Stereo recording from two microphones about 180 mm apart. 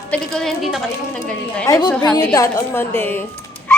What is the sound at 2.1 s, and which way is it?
A woman's voice, 20° left (ahead or behind).